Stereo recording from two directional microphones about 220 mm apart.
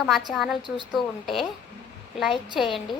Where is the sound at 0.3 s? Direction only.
Centre (ahead or behind).